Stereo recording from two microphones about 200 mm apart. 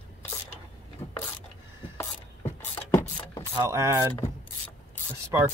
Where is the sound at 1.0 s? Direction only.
25° left (ahead or behind).